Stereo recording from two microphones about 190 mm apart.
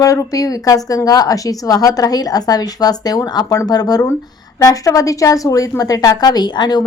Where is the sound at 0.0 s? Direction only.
20° left (ahead or behind).